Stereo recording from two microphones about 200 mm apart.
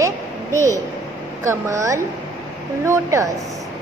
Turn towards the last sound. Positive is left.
turn(degrees=-15)  # may be behind; listen again after turning